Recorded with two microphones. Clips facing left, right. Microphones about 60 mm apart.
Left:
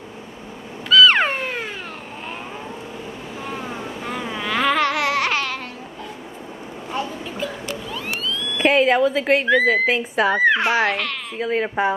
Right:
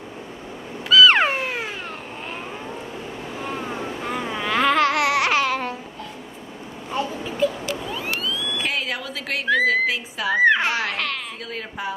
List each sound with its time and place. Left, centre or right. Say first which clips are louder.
0.8 s cat: even; centre
3.4 s babbling: right 1 dB; centre
7.4 s cat: right 8 dB; centre
7.9 s vehicle: even; centre
8.6 s a woman's voice: left 16 dB; left
9.8 s speech: left 5 dB; left
10.4 s speech: right 2 dB; centre
11.3 s speech: left 10 dB; left